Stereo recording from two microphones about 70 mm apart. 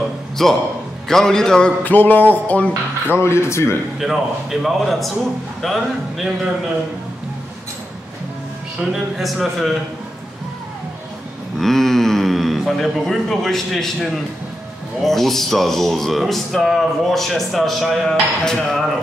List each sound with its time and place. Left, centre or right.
0.4 s a man's voice: centre
1.8 s music: left
3.2 s speech: left
4.0 s speech: centre
9.2 s speech: centre
11.5 s speech: centre